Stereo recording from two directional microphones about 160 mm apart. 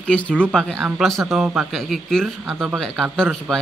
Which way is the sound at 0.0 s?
5° left (ahead or behind).